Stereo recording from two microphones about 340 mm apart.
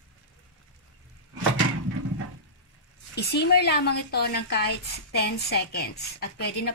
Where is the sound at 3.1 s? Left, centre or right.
Left.